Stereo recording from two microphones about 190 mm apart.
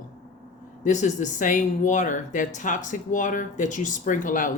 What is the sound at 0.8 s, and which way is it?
Speech, 40° left (ahead or behind).